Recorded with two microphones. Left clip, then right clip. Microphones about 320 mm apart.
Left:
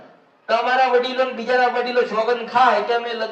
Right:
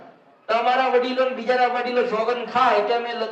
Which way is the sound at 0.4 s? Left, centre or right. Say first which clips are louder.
Left 2 dB; centre.